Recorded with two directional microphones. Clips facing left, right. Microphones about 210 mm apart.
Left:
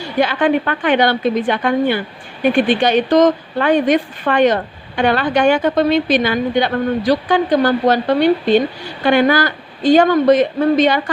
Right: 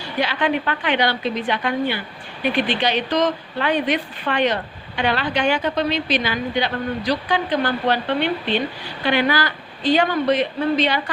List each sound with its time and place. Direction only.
0.2 s speech: 50° left (ahead or behind)